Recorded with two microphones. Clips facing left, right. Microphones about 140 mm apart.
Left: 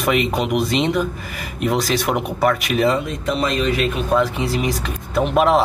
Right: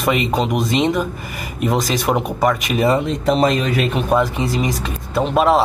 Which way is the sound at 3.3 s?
45° right (ahead or behind).